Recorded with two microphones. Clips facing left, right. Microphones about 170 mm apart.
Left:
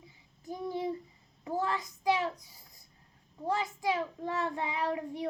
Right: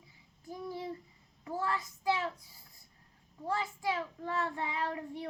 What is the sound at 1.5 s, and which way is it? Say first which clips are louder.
Child singing: left 3 dB; 20° left (ahead or behind).